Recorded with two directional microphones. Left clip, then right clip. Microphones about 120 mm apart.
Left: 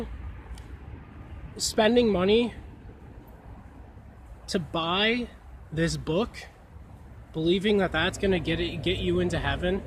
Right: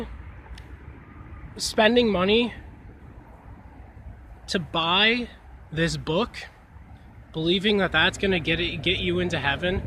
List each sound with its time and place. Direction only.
1.5 s speech: 10° left (ahead or behind)
4.4 s speech: 10° left (ahead or behind)